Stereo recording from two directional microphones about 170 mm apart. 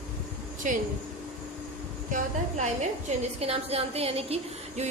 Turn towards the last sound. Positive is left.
turn(degrees=-35)  # may be behind; listen again after turning